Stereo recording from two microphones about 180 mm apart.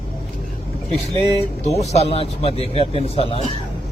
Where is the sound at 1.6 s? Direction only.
35° left (ahead or behind).